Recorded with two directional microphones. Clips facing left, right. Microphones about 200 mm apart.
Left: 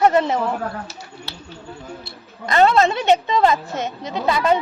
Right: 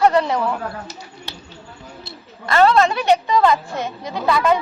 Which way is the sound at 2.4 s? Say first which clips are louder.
Right 1 dB; 20° left (ahead or behind).